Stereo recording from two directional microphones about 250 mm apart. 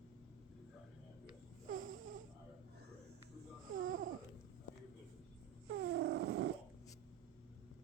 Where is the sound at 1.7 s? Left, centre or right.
Right.